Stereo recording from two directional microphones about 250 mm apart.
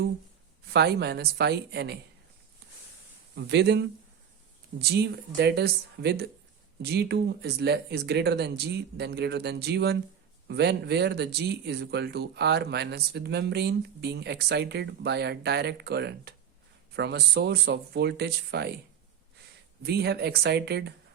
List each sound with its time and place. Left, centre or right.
0.7 s speech: right
3.3 s speech: right
19.8 s speech: right